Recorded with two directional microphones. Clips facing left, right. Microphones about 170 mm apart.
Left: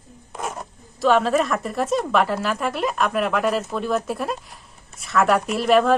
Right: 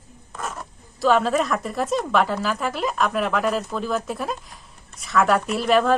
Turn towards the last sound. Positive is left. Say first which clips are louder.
# left 2 dB
turn(degrees=0)  # may be behind; listen again after turning